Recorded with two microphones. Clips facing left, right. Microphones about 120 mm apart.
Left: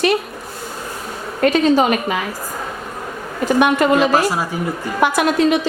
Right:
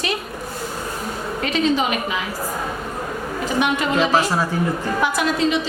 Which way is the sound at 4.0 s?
10° left (ahead or behind).